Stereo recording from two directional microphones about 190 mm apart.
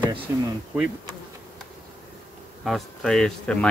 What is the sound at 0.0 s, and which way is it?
Speech, 25° right (ahead or behind).